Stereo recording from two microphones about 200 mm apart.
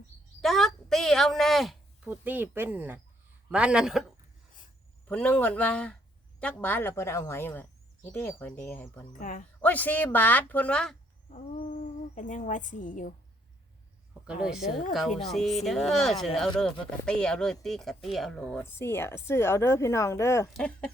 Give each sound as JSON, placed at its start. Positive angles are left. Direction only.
{"t": 0.4, "sound": "speech", "side_deg": 0}
{"t": 5.0, "sound": "speech", "side_deg": 5}
{"t": 9.1, "sound": "speech", "side_deg": 40}
{"t": 9.6, "sound": "speech", "side_deg": 10}
{"t": 11.3, "sound": "speech", "side_deg": 30}
{"t": 14.1, "sound": "speech", "side_deg": -5}